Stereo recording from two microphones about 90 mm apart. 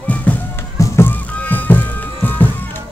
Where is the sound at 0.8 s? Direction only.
25° left (ahead or behind).